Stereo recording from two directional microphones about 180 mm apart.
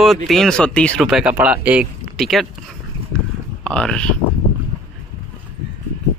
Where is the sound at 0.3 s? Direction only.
5° left (ahead or behind).